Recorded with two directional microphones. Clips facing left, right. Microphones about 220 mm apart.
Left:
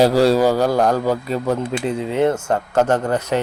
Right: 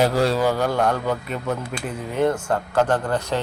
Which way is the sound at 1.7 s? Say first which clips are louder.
Left 7 dB; 25° left (ahead or behind).